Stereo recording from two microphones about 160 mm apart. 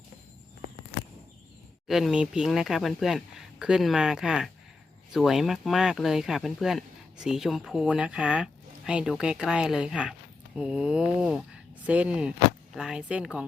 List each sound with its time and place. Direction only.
1.9 s speech: centre (ahead or behind)